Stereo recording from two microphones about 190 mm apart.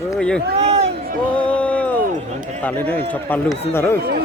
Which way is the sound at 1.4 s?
5° left (ahead or behind).